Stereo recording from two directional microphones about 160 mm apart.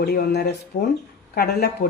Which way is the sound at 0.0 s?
80° left.